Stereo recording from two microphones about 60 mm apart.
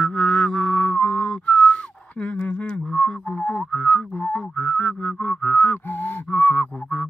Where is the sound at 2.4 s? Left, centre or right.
Left.